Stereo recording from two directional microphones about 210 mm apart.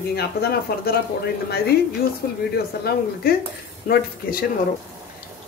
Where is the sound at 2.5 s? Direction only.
50° left (ahead or behind).